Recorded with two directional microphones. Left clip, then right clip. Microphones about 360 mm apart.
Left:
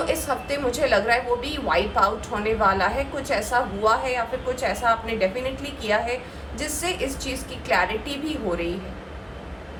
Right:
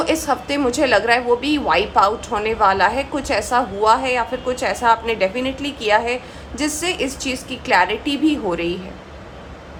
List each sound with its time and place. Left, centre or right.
0.0 s a woman's voice: right